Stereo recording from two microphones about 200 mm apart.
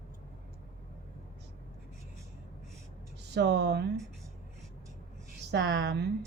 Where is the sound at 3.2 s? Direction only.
55° right (ahead or behind).